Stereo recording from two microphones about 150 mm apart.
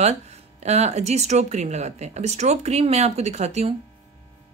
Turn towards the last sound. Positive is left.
turn(degrees=-45)  # may be behind; listen again after turning